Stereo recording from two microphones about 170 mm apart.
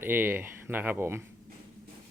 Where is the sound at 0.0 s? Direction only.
10° right (ahead or behind).